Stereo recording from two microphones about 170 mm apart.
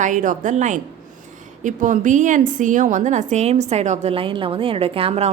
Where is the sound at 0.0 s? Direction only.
50° right (ahead or behind).